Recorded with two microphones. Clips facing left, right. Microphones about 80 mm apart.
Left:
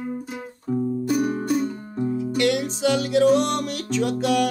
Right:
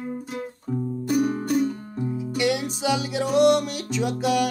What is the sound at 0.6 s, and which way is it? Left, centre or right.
Music, centre.